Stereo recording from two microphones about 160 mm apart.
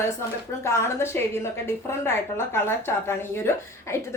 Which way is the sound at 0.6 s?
15° left (ahead or behind).